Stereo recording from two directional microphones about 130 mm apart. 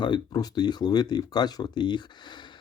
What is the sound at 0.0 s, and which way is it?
Speech, 30° left (ahead or behind).